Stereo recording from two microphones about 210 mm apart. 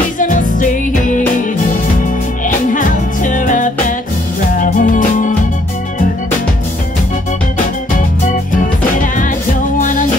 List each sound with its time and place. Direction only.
0.2 s music: 40° left (ahead or behind)
9.0 s music: 40° left (ahead or behind)